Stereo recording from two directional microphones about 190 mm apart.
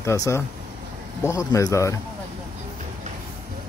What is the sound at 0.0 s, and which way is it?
Speech, 15° left (ahead or behind).